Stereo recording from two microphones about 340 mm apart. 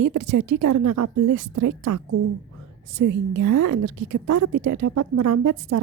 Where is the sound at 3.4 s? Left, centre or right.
Right.